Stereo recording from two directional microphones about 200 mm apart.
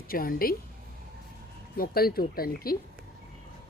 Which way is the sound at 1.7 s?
50° left (ahead or behind).